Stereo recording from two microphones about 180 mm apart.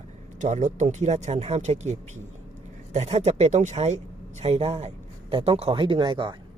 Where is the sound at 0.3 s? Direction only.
45° right (ahead or behind).